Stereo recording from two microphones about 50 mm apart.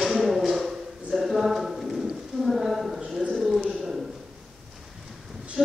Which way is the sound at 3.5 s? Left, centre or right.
Centre.